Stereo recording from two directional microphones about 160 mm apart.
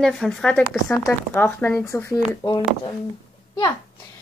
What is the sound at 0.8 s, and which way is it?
Speech, 15° left (ahead or behind).